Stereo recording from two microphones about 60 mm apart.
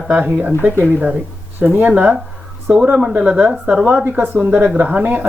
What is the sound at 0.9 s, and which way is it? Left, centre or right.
Speech, right.